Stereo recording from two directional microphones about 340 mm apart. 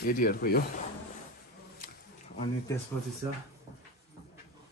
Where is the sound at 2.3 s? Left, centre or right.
Centre.